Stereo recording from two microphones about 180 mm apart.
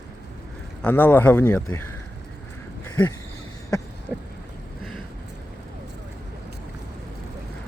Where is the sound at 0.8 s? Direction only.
10° left (ahead or behind).